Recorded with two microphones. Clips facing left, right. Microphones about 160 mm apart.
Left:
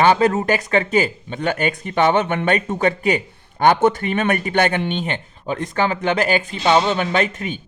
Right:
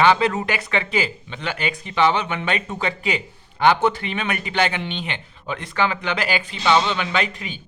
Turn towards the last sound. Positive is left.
turn(degrees=45)  # may be behind; listen again after turning